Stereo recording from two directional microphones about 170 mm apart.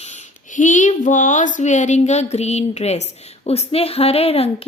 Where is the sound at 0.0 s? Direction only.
45° left (ahead or behind).